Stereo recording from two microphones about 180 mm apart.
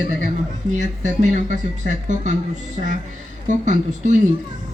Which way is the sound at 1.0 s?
45° right (ahead or behind).